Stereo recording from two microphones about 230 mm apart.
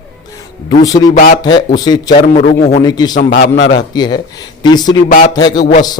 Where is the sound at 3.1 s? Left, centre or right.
Left.